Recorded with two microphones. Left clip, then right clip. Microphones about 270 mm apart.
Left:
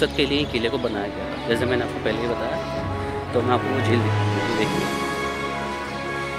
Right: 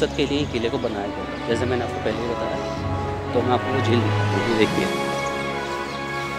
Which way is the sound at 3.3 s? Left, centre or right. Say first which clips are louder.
Even; centre.